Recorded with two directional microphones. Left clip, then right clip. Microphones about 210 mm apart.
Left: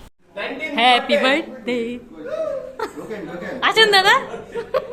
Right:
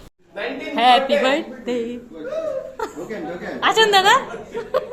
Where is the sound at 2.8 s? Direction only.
10° left (ahead or behind).